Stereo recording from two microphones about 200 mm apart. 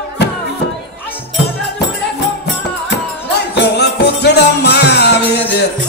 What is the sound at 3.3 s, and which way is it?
Music, 55° left (ahead or behind).